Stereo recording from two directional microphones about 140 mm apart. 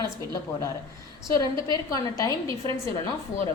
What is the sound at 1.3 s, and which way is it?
A woman's voice, 25° left (ahead or behind).